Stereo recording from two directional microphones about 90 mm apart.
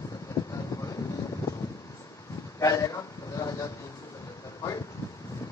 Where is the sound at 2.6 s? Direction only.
35° left (ahead or behind).